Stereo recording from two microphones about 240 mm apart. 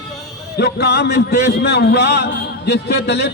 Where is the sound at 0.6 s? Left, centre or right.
Left.